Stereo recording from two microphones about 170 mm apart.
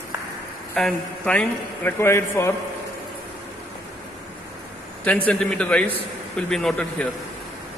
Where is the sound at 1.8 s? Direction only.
15° left (ahead or behind).